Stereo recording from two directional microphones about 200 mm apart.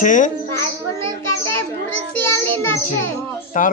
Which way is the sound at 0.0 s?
40° left (ahead or behind).